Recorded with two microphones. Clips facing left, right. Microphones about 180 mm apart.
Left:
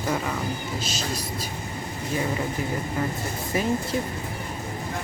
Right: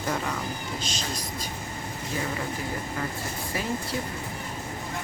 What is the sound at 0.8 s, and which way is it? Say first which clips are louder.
Speech: left 3 dB; 5° left (ahead or behind).